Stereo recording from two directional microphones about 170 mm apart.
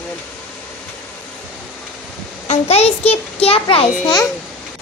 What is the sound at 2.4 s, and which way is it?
A child's voice, 40° left (ahead or behind).